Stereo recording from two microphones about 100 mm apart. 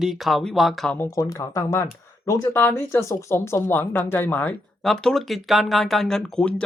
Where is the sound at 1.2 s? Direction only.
30° left (ahead or behind).